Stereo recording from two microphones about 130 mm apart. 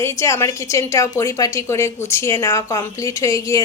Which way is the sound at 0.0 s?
20° left (ahead or behind).